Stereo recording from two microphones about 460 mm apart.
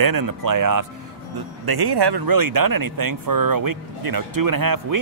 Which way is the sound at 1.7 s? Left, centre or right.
Right.